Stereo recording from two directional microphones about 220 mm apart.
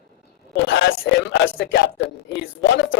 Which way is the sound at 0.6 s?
55° left (ahead or behind).